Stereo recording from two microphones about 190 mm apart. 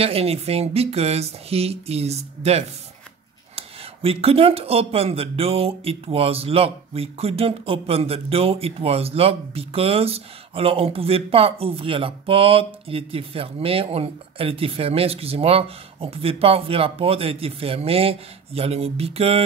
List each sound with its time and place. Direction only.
0.0 s speech: 30° right (ahead or behind)